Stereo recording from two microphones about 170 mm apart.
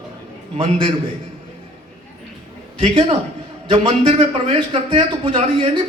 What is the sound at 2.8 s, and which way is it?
A man's voice, 30° right (ahead or behind).